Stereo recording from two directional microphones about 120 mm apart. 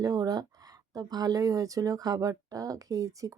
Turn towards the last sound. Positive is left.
turn(degrees=-30)  # may be behind; listen again after turning